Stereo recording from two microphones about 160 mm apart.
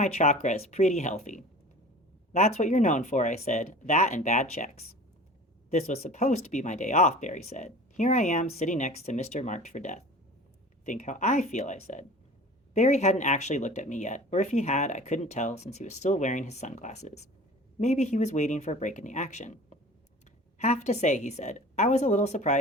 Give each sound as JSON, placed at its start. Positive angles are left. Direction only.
{"t": 0.0, "sound": "speech", "side_deg": 45}